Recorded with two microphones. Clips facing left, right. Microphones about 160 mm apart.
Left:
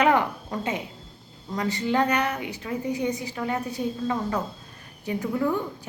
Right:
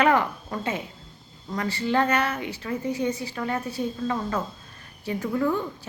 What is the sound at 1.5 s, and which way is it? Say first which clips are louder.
A woman's voice: even; 20° left (ahead or behind).